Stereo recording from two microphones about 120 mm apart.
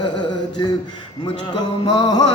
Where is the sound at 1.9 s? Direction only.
35° left (ahead or behind).